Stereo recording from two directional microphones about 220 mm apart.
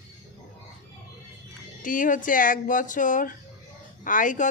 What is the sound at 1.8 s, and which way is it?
Speech, 35° left (ahead or behind).